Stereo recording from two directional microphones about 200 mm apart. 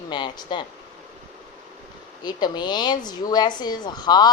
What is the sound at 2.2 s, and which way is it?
Speech, 20° left (ahead or behind).